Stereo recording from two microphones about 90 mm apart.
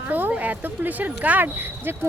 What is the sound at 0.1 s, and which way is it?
Speech, 20° right (ahead or behind).